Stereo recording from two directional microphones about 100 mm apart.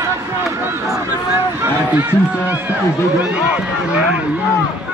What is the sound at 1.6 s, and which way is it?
Speech, 20° right (ahead or behind).